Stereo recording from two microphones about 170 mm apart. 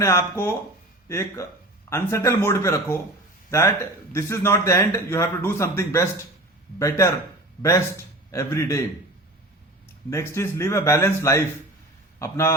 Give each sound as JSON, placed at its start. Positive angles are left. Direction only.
{"t": 0.0, "sound": "speech", "side_deg": 15}
{"t": 4.1, "sound": "a man's voice", "side_deg": 15}
{"t": 10.1, "sound": "speech", "side_deg": 15}